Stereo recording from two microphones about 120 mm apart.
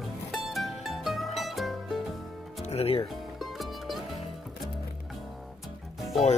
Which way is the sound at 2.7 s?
55° left (ahead or behind).